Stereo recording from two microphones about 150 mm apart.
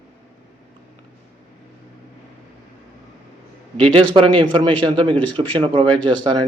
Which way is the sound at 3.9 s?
35° right (ahead or behind).